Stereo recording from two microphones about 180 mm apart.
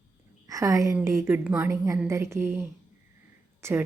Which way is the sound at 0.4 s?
20° right (ahead or behind).